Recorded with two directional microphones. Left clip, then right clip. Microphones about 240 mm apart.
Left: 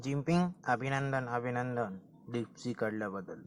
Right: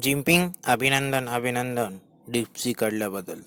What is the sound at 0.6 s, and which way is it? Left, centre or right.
Speech, right.